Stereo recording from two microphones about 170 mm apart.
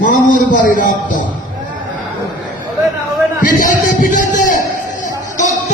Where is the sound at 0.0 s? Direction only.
50° left (ahead or behind).